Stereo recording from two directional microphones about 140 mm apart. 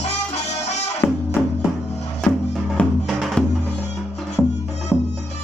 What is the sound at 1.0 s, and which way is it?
Music, 20° left (ahead or behind).